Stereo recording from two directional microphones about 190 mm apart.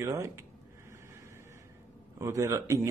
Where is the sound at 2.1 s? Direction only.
15° right (ahead or behind).